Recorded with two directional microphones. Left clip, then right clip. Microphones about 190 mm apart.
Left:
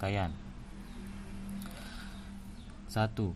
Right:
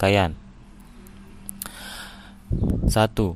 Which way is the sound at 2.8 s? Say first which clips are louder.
Right 13 dB; 45° right (ahead or behind).